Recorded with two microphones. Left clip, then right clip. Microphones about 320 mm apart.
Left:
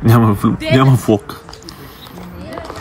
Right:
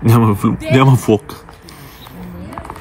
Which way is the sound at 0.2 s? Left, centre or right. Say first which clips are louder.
Left 1 dB; centre.